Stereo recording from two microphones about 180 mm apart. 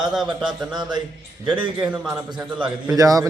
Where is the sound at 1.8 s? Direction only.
5° right (ahead or behind).